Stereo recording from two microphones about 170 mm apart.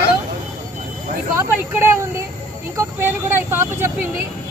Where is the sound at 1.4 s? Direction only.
15° right (ahead or behind).